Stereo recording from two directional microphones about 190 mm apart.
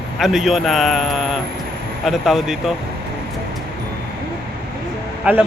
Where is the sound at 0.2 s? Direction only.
Centre (ahead or behind).